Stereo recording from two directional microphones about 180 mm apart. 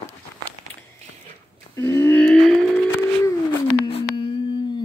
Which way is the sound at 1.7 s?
15° left (ahead or behind).